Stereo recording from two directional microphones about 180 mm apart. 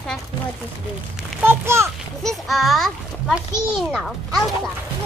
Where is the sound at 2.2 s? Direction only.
Centre (ahead or behind).